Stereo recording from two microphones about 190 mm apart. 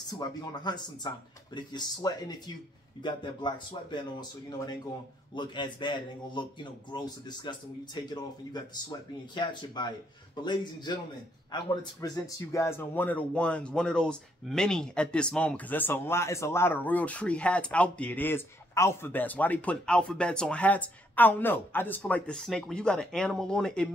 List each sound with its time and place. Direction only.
0.2 s a man's voice: 20° left (ahead or behind); by 23.9 s 5° left (ahead or behind)